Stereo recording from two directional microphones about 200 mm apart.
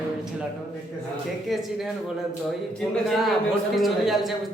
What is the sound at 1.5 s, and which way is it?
Speech, centre (ahead or behind).